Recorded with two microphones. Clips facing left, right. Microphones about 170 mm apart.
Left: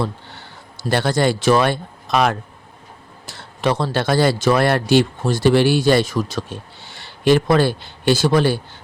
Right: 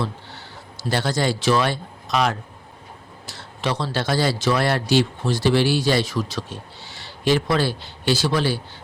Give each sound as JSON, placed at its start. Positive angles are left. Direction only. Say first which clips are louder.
{"t": 0.0, "sound": "a man's voice", "louder": "left 4 dB", "side_deg": 55}